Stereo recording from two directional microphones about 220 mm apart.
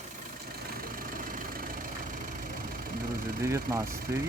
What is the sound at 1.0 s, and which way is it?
Vehicle, 40° right (ahead or behind).